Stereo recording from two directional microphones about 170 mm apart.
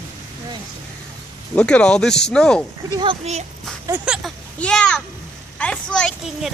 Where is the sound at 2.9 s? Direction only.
25° right (ahead or behind).